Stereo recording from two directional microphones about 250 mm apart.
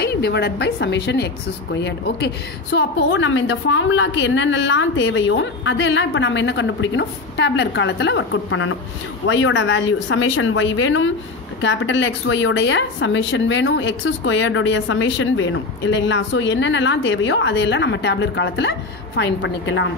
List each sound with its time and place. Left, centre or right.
0.0 s a woman's voice: left